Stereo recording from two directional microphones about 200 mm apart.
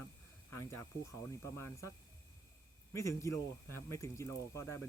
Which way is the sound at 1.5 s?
10° left (ahead or behind).